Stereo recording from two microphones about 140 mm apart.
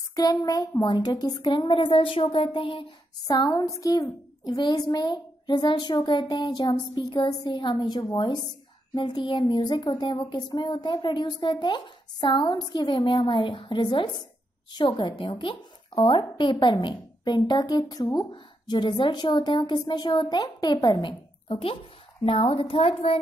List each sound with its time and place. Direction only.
0.1 s speech: 25° left (ahead or behind); by 23.1 s 45° left (ahead or behind)